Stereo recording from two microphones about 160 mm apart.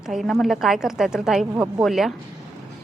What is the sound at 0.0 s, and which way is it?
A woman's voice, centre (ahead or behind).